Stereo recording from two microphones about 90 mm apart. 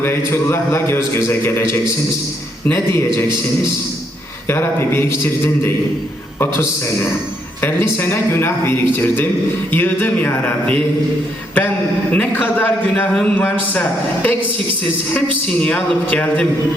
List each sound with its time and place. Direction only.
0.3 s speech: 30° left (ahead or behind)
2.6 s speech: 25° left (ahead or behind)
4.4 s speech: 25° left (ahead or behind)
7.6 s speech: 25° left (ahead or behind)
12.1 s a man's voice: 15° left (ahead or behind)
15.6 s a man's voice: 15° left (ahead or behind)